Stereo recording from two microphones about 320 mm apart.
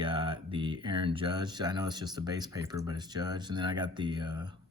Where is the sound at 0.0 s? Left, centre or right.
Centre.